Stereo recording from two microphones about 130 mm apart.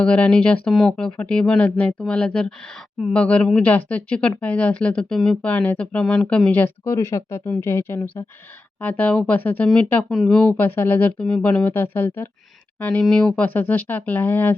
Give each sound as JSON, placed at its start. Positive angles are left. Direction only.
{"t": 0.0, "sound": "speech", "side_deg": 10}
{"t": 11.2, "sound": "speech", "side_deg": 5}